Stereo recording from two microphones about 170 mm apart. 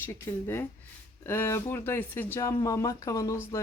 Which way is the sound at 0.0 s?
15° left (ahead or behind).